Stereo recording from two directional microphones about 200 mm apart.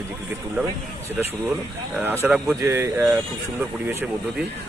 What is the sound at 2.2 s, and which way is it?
Speech, 15° right (ahead or behind).